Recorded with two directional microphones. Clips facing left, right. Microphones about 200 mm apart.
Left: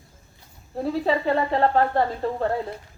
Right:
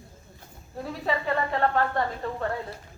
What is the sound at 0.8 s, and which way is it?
Speech, 30° left (ahead or behind).